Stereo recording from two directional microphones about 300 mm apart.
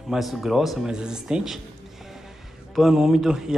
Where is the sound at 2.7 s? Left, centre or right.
Centre.